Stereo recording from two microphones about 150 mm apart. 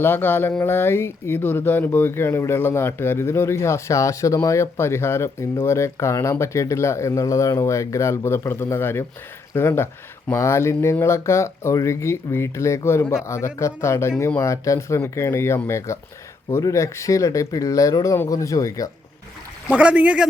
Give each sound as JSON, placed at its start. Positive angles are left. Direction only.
{"t": 0.0, "sound": "speech", "side_deg": 15}
{"t": 19.7, "sound": "speech", "side_deg": -10}